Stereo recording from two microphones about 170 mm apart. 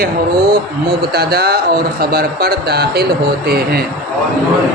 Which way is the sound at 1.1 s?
65° right (ahead or behind).